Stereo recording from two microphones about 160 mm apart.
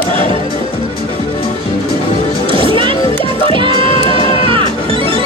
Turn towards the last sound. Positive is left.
turn(degrees=-35)  # may be behind; listen again after turning